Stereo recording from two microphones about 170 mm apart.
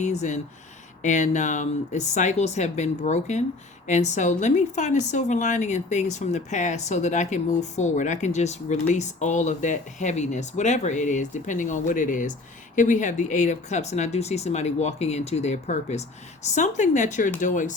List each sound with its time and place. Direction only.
0.0 s a woman's voice: 45° left (ahead or behind)